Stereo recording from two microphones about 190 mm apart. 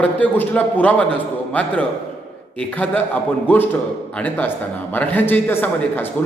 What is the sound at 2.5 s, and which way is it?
Speech, 10° left (ahead or behind).